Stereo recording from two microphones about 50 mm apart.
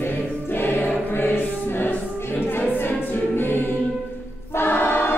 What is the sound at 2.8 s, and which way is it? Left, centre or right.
Choir, left.